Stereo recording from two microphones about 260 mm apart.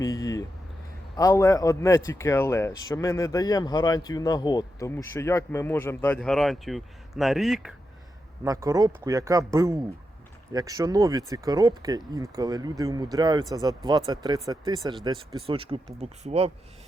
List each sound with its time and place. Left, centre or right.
0.0 s a sound: centre
1.1 s a man's voice: centre
8.4 s speech: centre